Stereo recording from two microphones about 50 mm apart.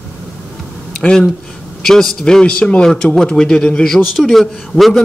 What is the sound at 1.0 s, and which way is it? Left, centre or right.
A man's voice, centre.